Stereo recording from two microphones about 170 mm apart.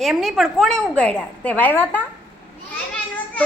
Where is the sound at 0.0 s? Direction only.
Centre (ahead or behind).